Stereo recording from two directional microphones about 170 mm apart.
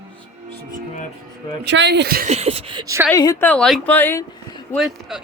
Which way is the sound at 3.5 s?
5° left (ahead or behind).